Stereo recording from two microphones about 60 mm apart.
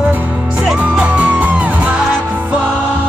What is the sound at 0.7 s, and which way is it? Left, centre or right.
Music, right.